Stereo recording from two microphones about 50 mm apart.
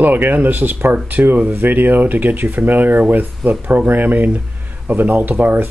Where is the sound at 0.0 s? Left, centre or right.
Right.